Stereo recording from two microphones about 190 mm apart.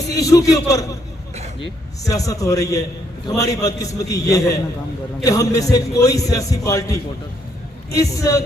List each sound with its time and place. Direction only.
0.1 s a man's voice: 20° left (ahead or behind)